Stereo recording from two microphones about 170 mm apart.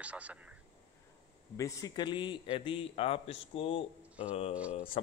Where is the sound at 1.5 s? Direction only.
20° left (ahead or behind); by 3.8 s 35° left (ahead or behind).